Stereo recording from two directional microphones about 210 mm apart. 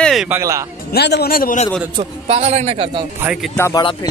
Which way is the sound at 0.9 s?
50° left (ahead or behind).